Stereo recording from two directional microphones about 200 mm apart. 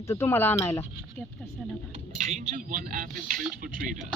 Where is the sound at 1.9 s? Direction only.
35° right (ahead or behind).